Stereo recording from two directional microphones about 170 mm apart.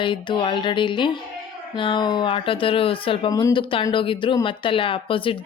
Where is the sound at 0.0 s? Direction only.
30° left (ahead or behind).